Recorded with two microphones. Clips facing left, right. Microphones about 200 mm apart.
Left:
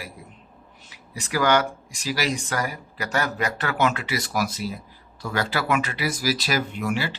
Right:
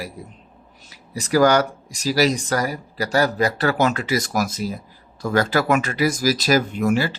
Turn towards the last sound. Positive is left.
turn(degrees=-45)  # may be behind; listen again after turning